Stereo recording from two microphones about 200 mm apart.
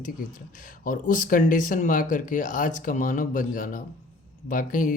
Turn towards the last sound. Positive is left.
turn(degrees=40)  # may be behind; listen again after turning